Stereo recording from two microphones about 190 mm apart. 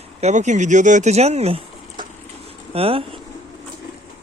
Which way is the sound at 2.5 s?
30° right (ahead or behind).